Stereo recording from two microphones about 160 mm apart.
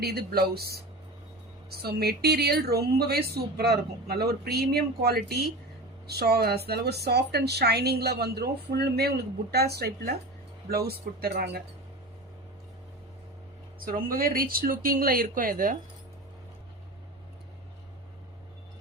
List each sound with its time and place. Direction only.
0.0 s a woman's voice: 80° right
13.7 s speech: 65° right (ahead or behind)